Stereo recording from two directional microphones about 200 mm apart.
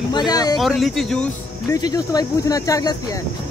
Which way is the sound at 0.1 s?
20° left (ahead or behind).